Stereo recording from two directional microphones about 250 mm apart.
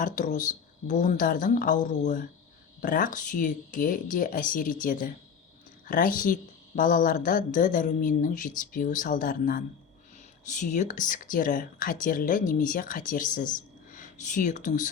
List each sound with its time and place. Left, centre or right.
0.0 s speech: left